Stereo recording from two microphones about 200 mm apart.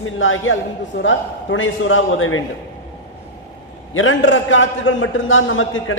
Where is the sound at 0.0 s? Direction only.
80° left.